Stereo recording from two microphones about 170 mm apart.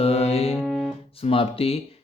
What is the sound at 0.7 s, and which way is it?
Music, centre (ahead or behind).